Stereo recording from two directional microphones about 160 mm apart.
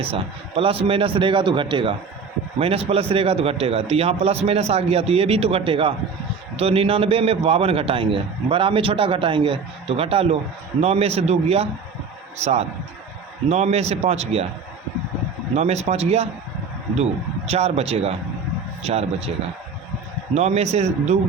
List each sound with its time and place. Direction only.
0.0 s a man's voice: 35° right (ahead or behind)
15.5 s a man's voice: 40° right (ahead or behind)
20.3 s a man's voice: 45° right (ahead or behind)